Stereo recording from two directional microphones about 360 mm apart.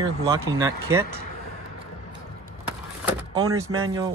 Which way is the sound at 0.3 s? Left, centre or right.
Centre.